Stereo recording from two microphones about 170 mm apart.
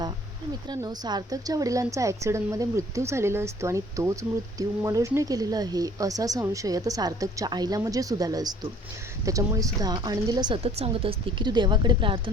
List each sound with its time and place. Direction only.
0.7 s a woman's voice: 25° right (ahead or behind)
10.6 s speech: 35° right (ahead or behind)